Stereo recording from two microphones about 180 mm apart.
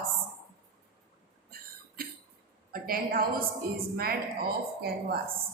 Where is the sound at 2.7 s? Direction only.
55° right (ahead or behind).